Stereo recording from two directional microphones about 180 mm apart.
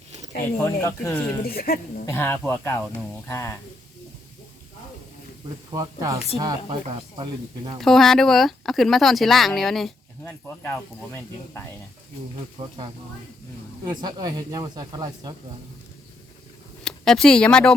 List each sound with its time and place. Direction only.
0.6 s speech: 15° left (ahead or behind)
1.5 s speech: 55° left (ahead or behind)
2.0 s speech: 15° left (ahead or behind)
5.7 s speech: 20° right (ahead or behind)
6.7 s speech: 30° right (ahead or behind)
7.8 s speech: centre (ahead or behind)
10.6 s speech: 10° left (ahead or behind)
12.5 s speech: 25° right (ahead or behind)
16.8 s speech: 5° left (ahead or behind)